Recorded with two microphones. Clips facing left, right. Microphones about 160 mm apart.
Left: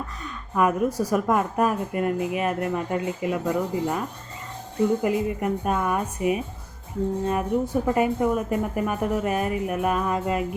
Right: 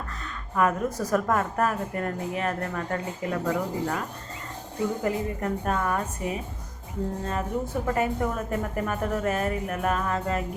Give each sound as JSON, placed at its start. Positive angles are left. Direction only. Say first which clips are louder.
{"t": 0.5, "sound": "a woman's voice", "louder": "left 3 dB", "side_deg": 10}
{"t": 5.0, "sound": "a woman's voice", "louder": "left 4 dB", "side_deg": 15}